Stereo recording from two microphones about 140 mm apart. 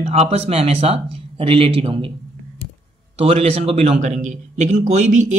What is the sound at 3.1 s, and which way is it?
A man's voice, 45° right (ahead or behind).